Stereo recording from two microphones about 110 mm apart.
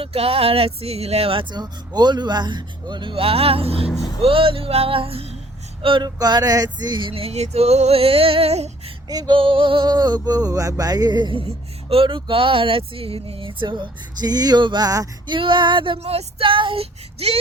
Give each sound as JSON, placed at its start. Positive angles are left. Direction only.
{"t": 0.0, "sound": "speech", "side_deg": -65}
{"t": 3.9, "sound": "speech", "side_deg": 35}
{"t": 4.2, "sound": "speech", "side_deg": -55}
{"t": 5.8, "sound": "music", "side_deg": -50}
{"t": 6.1, "sound": "a sound", "side_deg": -35}
{"t": 7.1, "sound": "female singing", "side_deg": -65}
{"t": 9.0, "sound": "a sound", "side_deg": -40}
{"t": 10.2, "sound": "music", "side_deg": -35}
{"t": 15.3, "sound": "music", "side_deg": -45}
{"t": 16.0, "sound": "speech", "side_deg": -70}